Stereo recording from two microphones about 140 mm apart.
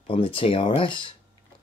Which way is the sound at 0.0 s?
40° left (ahead or behind).